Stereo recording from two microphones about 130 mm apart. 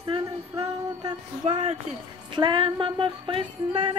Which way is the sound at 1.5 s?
50° right (ahead or behind).